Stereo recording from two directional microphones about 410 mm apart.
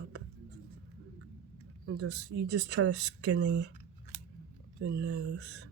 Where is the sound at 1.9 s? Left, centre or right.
Right.